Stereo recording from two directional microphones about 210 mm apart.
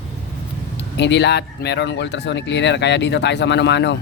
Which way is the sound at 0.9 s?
55° left (ahead or behind).